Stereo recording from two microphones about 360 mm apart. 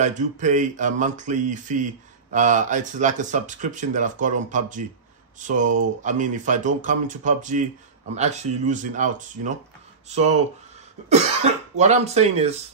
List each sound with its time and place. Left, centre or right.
0.0 s speech: centre